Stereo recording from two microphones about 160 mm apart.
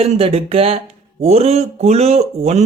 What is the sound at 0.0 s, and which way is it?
A man's voice, 40° right (ahead or behind).